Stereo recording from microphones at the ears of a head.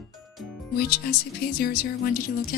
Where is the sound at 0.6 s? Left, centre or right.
Left.